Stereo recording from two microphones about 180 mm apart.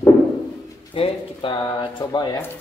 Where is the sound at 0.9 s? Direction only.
30° left (ahead or behind).